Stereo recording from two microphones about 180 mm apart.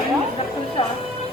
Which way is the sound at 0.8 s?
30° left (ahead or behind).